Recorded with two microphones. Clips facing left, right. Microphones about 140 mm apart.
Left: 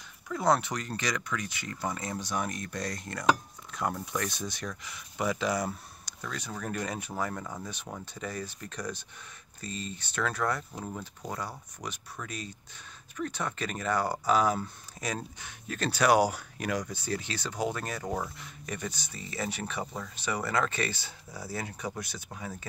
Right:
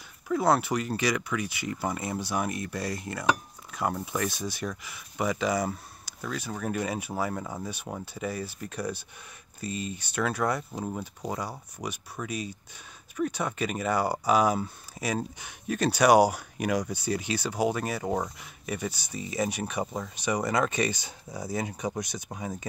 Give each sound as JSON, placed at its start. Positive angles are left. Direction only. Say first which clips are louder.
{"t": 0.3, "sound": "speech", "louder": "right 3 dB", "side_deg": -5}
{"t": 18.0, "sound": "speech", "louder": "right 3 dB", "side_deg": -20}
{"t": 18.4, "sound": "speech", "louder": "right 4 dB", "side_deg": -10}